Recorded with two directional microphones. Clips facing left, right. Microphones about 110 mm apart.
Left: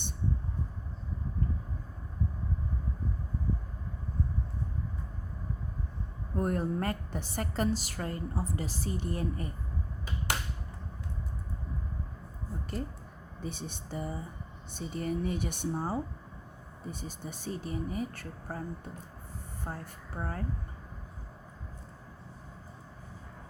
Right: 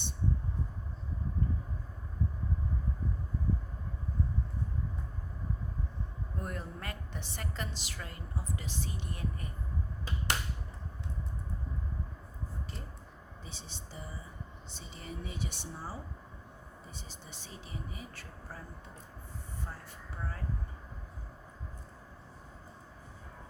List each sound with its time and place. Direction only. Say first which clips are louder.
6.3 s a woman's voice: left 11 dB; 45° left (ahead or behind)
13.4 s speech: left 11 dB; 55° left (ahead or behind)
20.1 s speech: left 6 dB; 45° left (ahead or behind)